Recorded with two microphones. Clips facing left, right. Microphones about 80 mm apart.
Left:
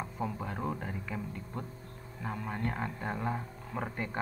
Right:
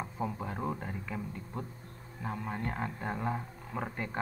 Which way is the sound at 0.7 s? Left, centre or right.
Centre.